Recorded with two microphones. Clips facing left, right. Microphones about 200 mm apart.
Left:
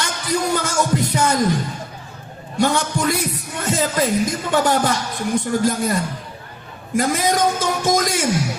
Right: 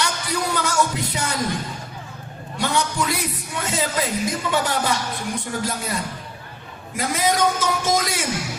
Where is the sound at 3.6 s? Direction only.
50° left (ahead or behind).